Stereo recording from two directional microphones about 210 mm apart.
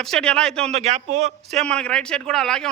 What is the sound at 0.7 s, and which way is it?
Speech, 30° right (ahead or behind).